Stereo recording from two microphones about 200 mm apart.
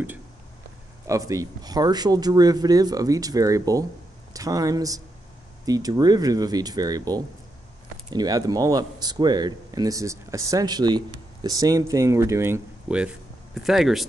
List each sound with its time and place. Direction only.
1.0 s speech: 15° right (ahead or behind)